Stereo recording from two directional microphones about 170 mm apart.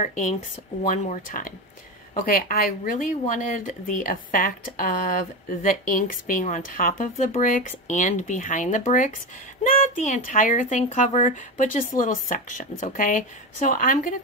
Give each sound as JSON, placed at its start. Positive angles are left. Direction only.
{"t": 0.0, "sound": "speech", "side_deg": 50}